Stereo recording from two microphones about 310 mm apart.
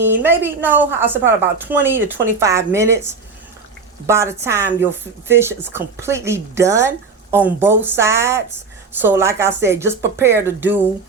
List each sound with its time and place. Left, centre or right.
0.1 s speech: centre
4.0 s speech: centre